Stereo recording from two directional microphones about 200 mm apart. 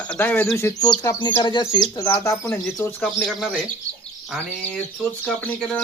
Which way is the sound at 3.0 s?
Centre (ahead or behind).